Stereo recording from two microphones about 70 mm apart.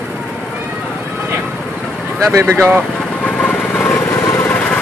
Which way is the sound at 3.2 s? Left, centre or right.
Left.